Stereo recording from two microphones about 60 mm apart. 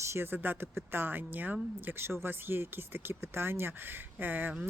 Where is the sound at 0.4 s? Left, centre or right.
Right.